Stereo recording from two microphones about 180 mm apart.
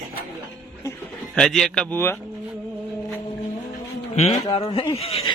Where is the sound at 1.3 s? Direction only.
Centre (ahead or behind).